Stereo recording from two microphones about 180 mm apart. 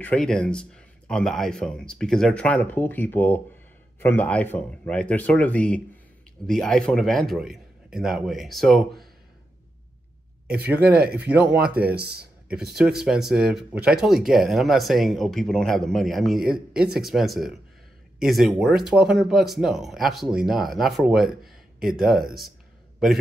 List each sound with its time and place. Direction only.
0.0 s speech: 5° left (ahead or behind)
10.7 s speech: 10° right (ahead or behind)
11.9 s speech: 65° right (ahead or behind)
12.7 s speech: centre (ahead or behind)